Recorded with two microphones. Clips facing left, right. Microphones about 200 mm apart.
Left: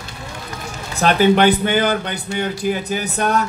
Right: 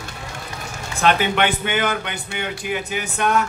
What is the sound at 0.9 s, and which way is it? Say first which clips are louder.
A man's voice: left 5 dB; 35° left (ahead or behind).